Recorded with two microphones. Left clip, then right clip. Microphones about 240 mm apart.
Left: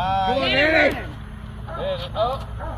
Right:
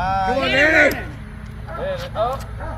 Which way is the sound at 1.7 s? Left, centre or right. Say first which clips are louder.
Right 1 dB; left.